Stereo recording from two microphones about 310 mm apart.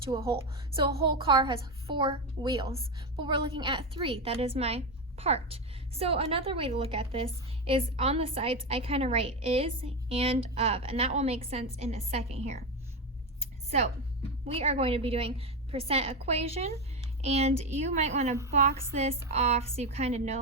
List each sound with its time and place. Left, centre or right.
0.0 s a woman's voice: centre
14.4 s a woman's voice: centre